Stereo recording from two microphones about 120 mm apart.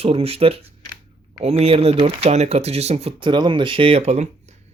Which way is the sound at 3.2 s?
40° right (ahead or behind).